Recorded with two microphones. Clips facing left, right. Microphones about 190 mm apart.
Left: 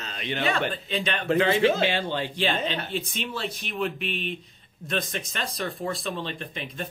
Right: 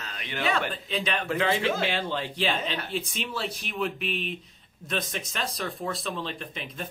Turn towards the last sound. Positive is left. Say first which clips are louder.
# left 2 dB
turn(degrees=0)  # may be behind; listen again after turning